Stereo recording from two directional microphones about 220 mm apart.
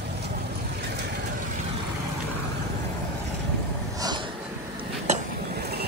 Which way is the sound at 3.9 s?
20° right (ahead or behind).